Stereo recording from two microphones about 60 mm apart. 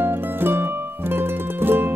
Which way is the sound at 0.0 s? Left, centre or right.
Right.